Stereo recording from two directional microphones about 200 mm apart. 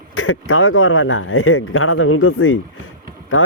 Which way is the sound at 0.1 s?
90° left.